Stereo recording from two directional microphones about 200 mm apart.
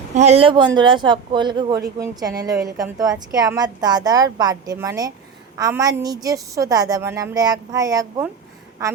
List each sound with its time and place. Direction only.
0.1 s a woman's voice: 35° right (ahead or behind); by 8.3 s 15° right (ahead or behind)